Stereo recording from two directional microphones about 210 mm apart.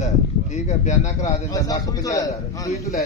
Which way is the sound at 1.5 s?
15° left (ahead or behind).